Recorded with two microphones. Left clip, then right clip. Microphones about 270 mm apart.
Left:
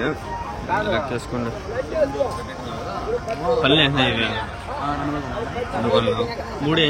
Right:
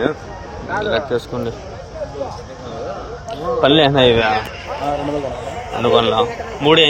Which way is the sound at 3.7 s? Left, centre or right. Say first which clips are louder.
Right 8 dB; centre.